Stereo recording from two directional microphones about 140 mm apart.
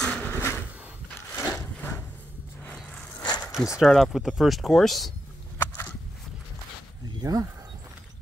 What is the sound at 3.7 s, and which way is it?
Speech, centre (ahead or behind).